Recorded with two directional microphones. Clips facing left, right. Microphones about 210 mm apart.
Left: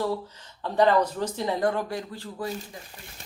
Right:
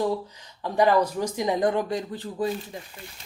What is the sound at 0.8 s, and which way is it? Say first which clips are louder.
Speech: right 1 dB; 10° right (ahead or behind).